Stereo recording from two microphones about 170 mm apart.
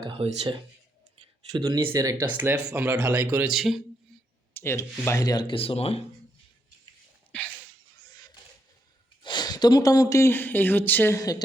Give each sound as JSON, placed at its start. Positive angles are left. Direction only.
{"t": 0.0, "sound": "speech", "side_deg": -30}
{"t": 1.5, "sound": "speech", "side_deg": -25}
{"t": 3.5, "sound": "speech", "side_deg": 0}
{"t": 4.6, "sound": "speech", "side_deg": 15}
{"t": 7.3, "sound": "a sound", "side_deg": 10}
{"t": 9.2, "sound": "speech", "side_deg": 25}